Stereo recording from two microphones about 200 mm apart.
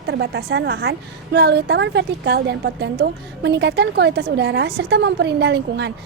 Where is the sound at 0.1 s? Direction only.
55° right (ahead or behind).